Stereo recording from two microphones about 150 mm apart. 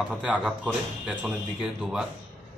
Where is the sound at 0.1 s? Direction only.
10° right (ahead or behind).